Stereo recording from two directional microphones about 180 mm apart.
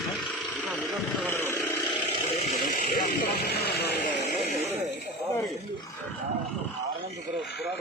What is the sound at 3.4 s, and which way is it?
Vehicle, 60° left (ahead or behind).